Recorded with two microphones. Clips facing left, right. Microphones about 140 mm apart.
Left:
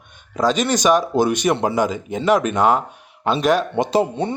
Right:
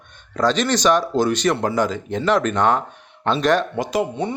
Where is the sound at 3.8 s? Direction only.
30° left (ahead or behind).